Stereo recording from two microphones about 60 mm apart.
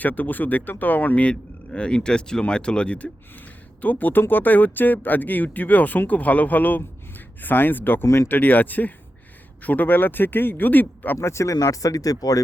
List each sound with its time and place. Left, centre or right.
0.0 s speech: left
8.0 s speech: left
8.3 s speech: left
11.2 s speech: left
11.5 s speech: left